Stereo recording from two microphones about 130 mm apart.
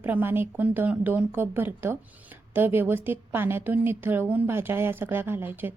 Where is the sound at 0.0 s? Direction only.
15° right (ahead or behind).